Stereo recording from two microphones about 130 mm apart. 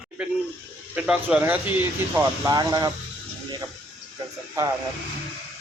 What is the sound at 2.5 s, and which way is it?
Speech, 30° right (ahead or behind).